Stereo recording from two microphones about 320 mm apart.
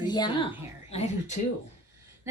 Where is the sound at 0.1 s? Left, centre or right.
Centre.